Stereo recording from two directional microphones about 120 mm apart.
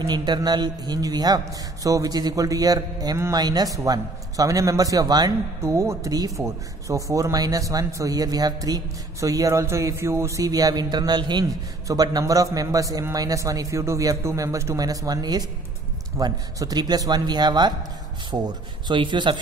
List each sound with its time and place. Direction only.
0.0 s a man's voice: 35° right (ahead or behind)
5.6 s a man's voice: 25° right (ahead or behind); by 19.4 s 40° right (ahead or behind)